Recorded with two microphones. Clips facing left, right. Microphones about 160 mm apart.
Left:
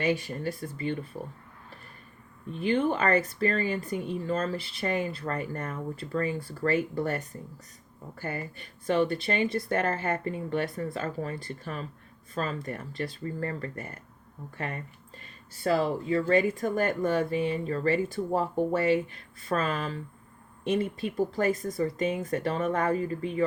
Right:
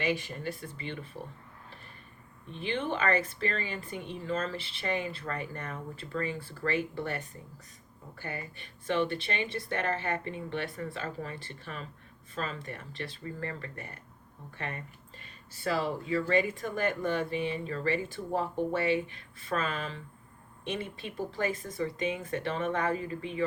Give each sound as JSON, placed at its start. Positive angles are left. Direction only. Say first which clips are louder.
{"t": 0.0, "sound": "speech", "louder": "left 4 dB", "side_deg": 40}
{"t": 2.5, "sound": "speech", "louder": "left 7 dB", "side_deg": 40}
{"t": 15.5, "sound": "speech", "louder": "left 5 dB", "side_deg": 40}